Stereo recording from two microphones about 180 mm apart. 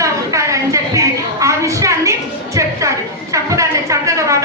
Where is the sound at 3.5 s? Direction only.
15° right (ahead or behind).